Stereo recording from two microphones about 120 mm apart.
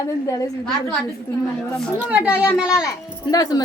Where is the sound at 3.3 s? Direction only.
35° left (ahead or behind).